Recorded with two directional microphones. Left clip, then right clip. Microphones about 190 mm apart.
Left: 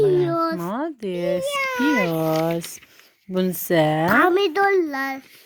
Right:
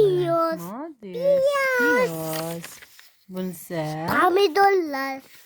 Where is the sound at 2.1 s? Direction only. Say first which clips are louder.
Left 8 dB; 30° left (ahead or behind).